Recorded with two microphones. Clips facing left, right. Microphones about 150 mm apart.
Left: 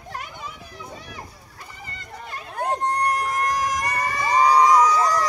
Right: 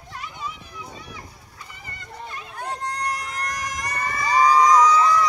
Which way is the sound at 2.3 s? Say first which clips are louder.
Left 7 dB; 50° left (ahead or behind).